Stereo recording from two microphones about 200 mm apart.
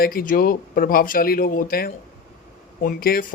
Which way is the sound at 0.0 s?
45° left (ahead or behind).